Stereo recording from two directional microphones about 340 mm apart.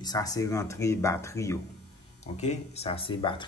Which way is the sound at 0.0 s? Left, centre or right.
Centre.